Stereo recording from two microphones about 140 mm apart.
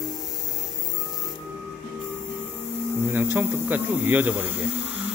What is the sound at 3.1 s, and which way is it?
Speech, 15° right (ahead or behind).